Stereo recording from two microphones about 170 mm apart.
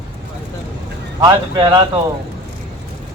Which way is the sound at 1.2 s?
25° right (ahead or behind).